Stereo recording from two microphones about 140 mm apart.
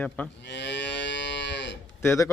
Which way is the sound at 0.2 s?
10° left (ahead or behind).